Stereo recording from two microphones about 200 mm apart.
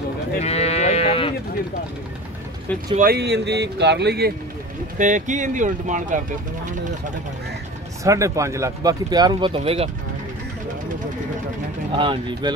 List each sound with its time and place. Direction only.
0.4 s sheep: 30° left (ahead or behind)
3.0 s speech: 50° right (ahead or behind)
4.9 s speech: 40° right (ahead or behind)
8.0 s speech: 15° right (ahead or behind)
11.9 s speech: 25° right (ahead or behind)